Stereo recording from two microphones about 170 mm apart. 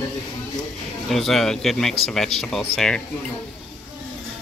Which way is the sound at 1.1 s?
Centre (ahead or behind).